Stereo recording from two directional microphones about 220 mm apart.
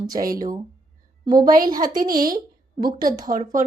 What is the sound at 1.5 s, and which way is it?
Speech, 40° right (ahead or behind).